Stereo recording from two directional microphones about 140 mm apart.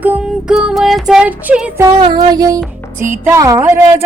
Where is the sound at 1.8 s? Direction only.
30° right (ahead or behind).